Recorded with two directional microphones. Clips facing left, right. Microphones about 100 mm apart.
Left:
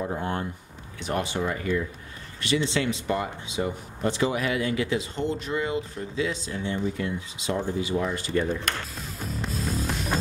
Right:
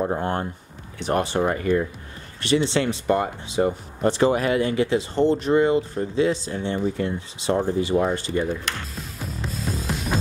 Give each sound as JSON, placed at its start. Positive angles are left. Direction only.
{"t": 0.0, "sound": "speech", "side_deg": -40}
{"t": 2.4, "sound": "speech", "side_deg": -30}
{"t": 8.3, "sound": "speech", "side_deg": -20}
{"t": 8.6, "sound": "music", "side_deg": 0}